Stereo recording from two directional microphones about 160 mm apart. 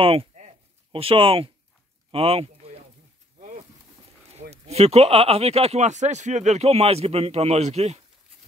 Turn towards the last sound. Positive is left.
turn(degrees=-45)  # may be behind; listen again after turning